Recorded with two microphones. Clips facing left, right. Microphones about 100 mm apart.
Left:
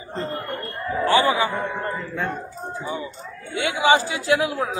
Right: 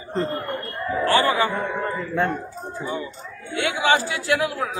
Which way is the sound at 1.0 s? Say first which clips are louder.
Left 1 dB; 20° left (ahead or behind).